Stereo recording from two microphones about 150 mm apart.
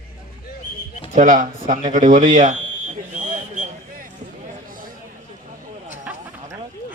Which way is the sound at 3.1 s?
55° right (ahead or behind).